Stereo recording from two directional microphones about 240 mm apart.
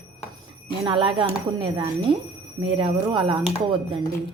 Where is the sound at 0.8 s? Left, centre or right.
Centre.